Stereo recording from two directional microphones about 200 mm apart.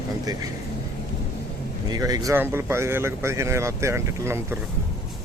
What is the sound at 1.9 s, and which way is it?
Speech, 20° right (ahead or behind).